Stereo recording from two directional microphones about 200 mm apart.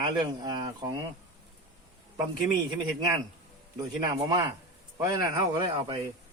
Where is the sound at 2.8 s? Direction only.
20° right (ahead or behind).